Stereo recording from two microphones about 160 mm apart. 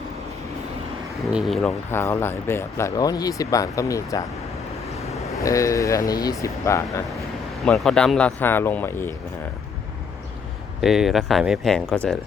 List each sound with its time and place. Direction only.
1.1 s speech: centre (ahead or behind)
1.9 s speech: 15° left (ahead or behind)
7.6 s speech: 5° left (ahead or behind)
10.8 s speech: centre (ahead or behind)